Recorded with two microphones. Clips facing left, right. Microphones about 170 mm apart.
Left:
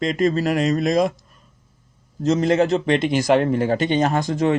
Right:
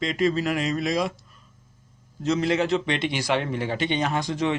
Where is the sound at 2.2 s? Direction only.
45° left (ahead or behind).